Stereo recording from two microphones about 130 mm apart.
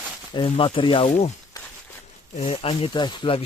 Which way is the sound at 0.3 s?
40° left (ahead or behind).